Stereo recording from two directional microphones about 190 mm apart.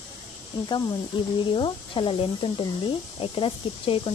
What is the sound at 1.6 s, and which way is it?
Speech, 25° left (ahead or behind).